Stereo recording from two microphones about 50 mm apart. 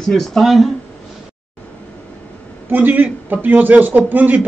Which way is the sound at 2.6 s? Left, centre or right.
Right.